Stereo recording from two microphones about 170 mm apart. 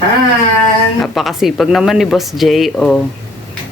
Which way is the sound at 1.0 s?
Centre (ahead or behind).